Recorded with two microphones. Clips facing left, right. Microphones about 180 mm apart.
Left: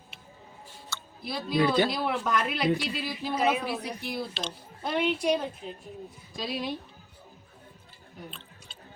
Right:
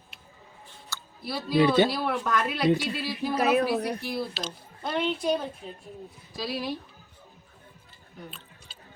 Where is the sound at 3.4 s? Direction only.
65° right (ahead or behind).